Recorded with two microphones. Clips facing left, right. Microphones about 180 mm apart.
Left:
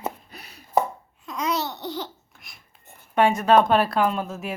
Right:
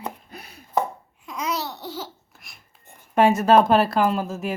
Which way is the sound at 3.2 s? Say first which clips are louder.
Right 2 dB; 5° right (ahead or behind).